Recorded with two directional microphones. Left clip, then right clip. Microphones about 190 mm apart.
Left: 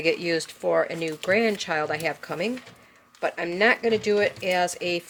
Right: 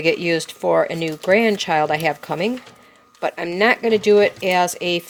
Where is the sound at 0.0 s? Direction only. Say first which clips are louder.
Right 5 dB; 30° right (ahead or behind).